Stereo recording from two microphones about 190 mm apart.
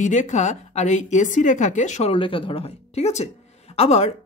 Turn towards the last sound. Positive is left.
turn(degrees=35)  # may be behind; listen again after turning